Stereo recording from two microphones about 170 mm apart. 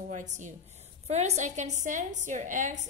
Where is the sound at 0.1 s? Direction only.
45° right (ahead or behind).